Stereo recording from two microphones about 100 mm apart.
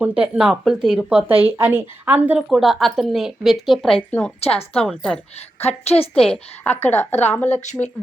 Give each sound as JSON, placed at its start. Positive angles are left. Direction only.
{"t": 0.0, "sound": "a woman's voice", "side_deg": -15}
{"t": 1.4, "sound": "speech", "side_deg": -20}
{"t": 2.5, "sound": "a woman's voice", "side_deg": 0}
{"t": 4.4, "sound": "a woman's voice", "side_deg": 90}
{"t": 4.9, "sound": "a woman's voice", "side_deg": 5}
{"t": 5.5, "sound": "a woman's voice", "side_deg": 90}
{"t": 6.1, "sound": "a woman's voice", "side_deg": 5}
{"t": 6.8, "sound": "speech", "side_deg": 20}